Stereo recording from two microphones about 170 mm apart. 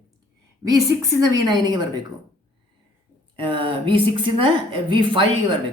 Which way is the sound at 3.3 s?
30° right (ahead or behind).